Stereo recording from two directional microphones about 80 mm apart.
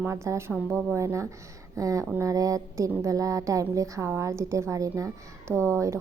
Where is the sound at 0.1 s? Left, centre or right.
Right.